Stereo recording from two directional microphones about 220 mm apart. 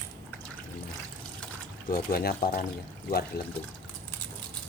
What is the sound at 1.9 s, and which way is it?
Speech, 45° left (ahead or behind).